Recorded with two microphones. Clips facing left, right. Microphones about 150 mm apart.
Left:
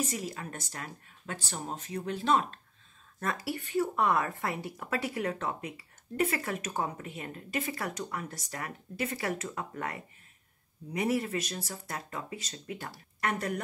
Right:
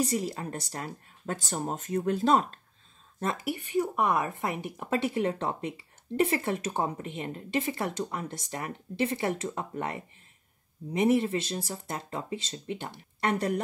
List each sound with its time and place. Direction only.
0.0 s speech: 30° right (ahead or behind)
3.2 s a woman's voice: 25° right (ahead or behind)